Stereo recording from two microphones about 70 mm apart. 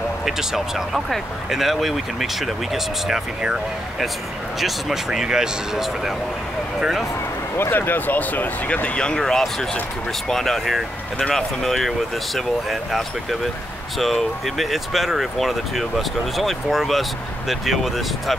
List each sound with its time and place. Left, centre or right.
0.2 s speech: centre
4.6 s speech: centre
7.5 s speech: left; by 18.3 s centre